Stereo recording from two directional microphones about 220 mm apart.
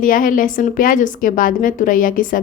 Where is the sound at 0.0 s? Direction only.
40° left (ahead or behind).